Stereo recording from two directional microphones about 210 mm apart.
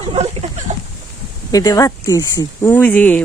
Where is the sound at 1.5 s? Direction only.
15° left (ahead or behind).